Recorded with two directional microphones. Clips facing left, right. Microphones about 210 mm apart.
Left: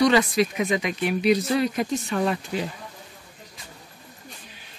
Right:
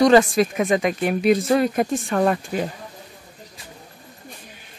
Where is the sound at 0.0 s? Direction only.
45° right (ahead or behind).